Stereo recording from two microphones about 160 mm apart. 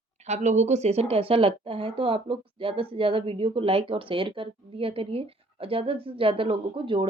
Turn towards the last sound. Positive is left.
turn(degrees=-35)  # may be behind; listen again after turning